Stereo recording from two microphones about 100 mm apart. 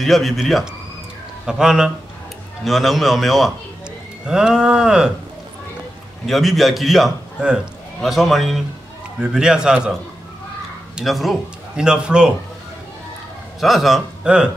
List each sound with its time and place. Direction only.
0.0 s a man's voice: centre (ahead or behind)
6.2 s a man's voice: centre (ahead or behind)
11.0 s a man's voice: centre (ahead or behind)
13.6 s a man's voice: centre (ahead or behind)